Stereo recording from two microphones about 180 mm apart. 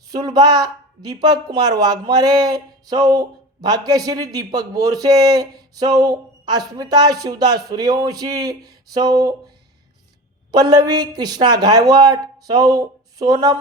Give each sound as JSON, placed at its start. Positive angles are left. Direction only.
{"t": 0.1, "sound": "speech", "side_deg": -20}
{"t": 10.5, "sound": "speech", "side_deg": -20}